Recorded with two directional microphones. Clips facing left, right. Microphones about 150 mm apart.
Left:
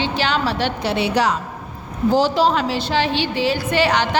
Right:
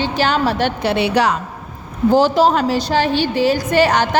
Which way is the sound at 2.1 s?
50° right (ahead or behind).